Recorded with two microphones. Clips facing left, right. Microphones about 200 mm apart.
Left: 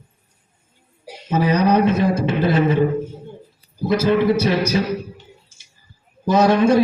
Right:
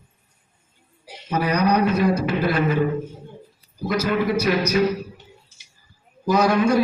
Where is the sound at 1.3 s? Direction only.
25° left (ahead or behind).